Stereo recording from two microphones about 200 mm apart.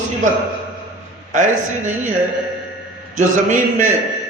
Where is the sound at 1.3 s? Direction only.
40° right (ahead or behind).